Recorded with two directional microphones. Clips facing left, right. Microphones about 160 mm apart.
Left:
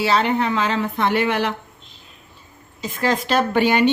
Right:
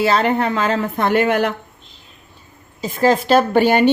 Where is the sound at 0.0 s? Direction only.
45° right (ahead or behind).